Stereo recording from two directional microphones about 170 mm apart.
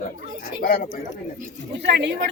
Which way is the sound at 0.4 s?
55° left (ahead or behind).